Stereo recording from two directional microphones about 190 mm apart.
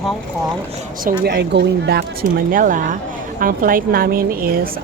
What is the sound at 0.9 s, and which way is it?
Speech, 45° right (ahead or behind).